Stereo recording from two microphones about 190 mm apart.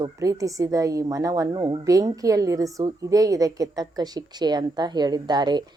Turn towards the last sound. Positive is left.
turn(degrees=-20)  # may be behind; listen again after turning